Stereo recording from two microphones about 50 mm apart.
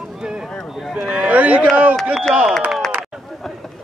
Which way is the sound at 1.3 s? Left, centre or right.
Right.